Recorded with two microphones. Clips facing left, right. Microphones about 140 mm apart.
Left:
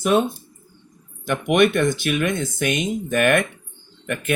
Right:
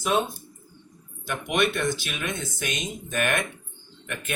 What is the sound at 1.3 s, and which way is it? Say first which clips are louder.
Speech: left 8 dB; 55° left (ahead or behind).